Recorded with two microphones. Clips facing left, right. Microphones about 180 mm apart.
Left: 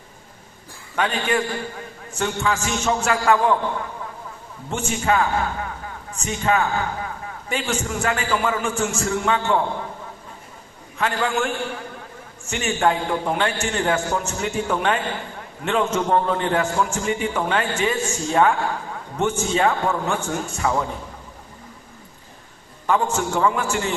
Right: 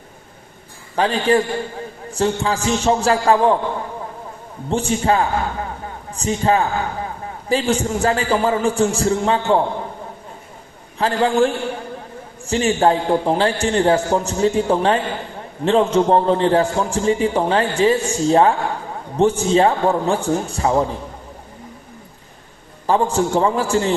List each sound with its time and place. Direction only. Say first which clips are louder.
0.9 s a man's voice: right 6 dB; 35° right (ahead or behind)
4.7 s a man's voice: right 4 dB; 35° right (ahead or behind)
10.9 s a man's voice: right 6 dB; 35° right (ahead or behind)
22.9 s a man's voice: right 4 dB; 35° right (ahead or behind)